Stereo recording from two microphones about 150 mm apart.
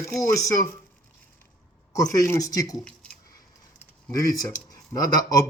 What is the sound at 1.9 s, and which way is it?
Speech, 25° left (ahead or behind).